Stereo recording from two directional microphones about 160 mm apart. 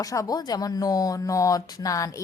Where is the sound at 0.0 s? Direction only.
20° left (ahead or behind).